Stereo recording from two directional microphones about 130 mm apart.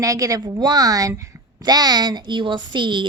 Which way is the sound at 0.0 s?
25° right (ahead or behind).